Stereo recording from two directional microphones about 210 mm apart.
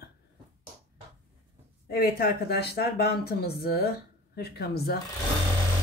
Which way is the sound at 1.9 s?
45° left (ahead or behind).